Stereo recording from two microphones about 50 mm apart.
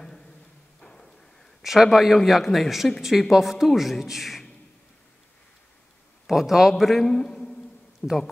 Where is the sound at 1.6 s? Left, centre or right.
Centre.